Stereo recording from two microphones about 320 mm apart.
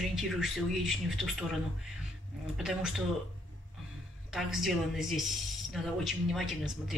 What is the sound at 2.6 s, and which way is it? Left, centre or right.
Speech, centre.